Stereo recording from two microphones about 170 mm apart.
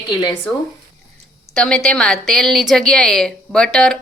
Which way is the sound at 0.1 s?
25° left (ahead or behind).